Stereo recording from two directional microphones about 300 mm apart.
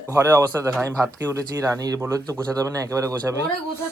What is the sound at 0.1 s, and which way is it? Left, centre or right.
Speech, centre.